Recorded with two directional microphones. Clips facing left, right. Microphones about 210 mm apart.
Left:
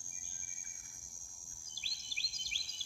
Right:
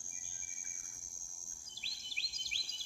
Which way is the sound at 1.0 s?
35° left (ahead or behind).